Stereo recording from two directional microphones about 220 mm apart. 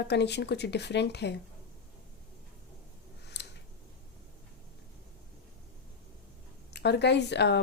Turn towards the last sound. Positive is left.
turn(degrees=50)  # may be behind; listen again after turning